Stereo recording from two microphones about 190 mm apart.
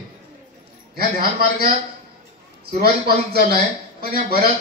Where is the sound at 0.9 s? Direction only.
55° right (ahead or behind).